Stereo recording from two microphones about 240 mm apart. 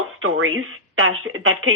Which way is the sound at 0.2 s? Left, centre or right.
Right.